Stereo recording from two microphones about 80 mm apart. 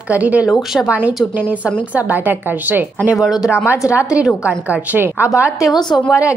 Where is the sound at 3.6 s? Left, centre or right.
Left.